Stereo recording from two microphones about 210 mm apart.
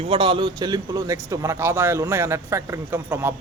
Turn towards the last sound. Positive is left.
turn(degrees=-10)  # may be behind; listen again after turning